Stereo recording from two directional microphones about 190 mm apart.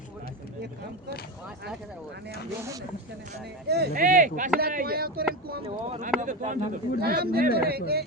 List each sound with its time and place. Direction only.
3.7 s speech: 50° right (ahead or behind)
5.6 s speech: 35° right (ahead or behind)
7.0 s speech: 55° right (ahead or behind)